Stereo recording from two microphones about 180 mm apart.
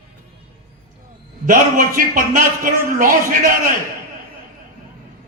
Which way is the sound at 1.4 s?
50° right (ahead or behind).